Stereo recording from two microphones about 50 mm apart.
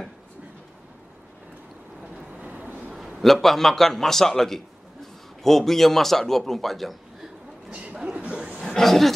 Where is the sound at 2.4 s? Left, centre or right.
Right.